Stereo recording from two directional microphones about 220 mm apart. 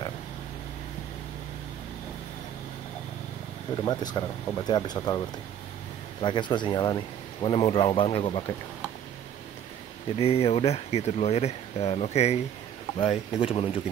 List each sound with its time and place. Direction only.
3.8 s speech: 20° left (ahead or behind)
6.2 s speech: 20° left (ahead or behind)
10.1 s speech: 25° left (ahead or behind)